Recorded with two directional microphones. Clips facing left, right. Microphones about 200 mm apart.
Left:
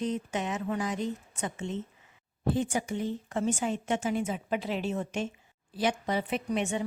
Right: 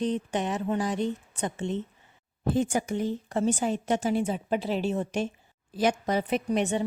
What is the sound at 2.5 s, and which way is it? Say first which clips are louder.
A woman's voice: right 3 dB; 45° right (ahead or behind).